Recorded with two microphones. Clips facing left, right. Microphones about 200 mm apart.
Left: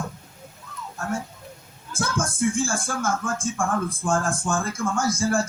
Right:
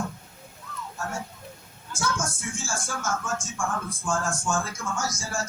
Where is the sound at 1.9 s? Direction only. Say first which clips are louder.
Left 3 dB; 55° left (ahead or behind).